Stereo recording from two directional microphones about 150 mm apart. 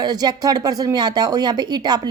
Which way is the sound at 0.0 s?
25° right (ahead or behind).